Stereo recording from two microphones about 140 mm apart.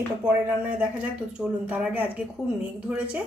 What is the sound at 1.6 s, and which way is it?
Speech, 10° right (ahead or behind).